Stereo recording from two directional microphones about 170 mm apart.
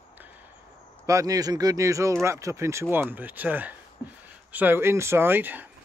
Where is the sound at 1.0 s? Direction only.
20° right (ahead or behind).